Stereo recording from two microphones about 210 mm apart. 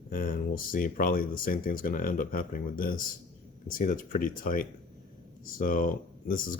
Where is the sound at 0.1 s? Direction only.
40° left (ahead or behind).